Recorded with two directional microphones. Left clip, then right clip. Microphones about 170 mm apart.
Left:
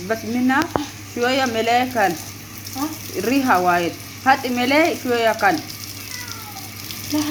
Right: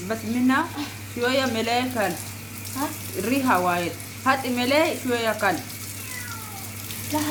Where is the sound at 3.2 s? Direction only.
5° left (ahead or behind).